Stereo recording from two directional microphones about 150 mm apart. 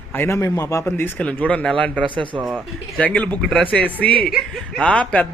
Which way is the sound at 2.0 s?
35° right (ahead or behind).